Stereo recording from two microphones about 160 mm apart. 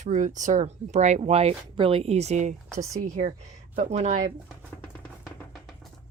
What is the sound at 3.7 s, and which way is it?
Speech, 45° right (ahead or behind).